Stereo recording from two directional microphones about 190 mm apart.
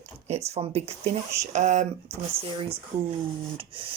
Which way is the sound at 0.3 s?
35° right (ahead or behind).